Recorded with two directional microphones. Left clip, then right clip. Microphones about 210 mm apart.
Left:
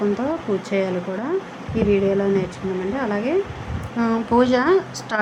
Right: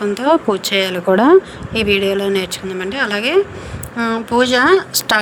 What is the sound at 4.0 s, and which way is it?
Speech, 25° right (ahead or behind).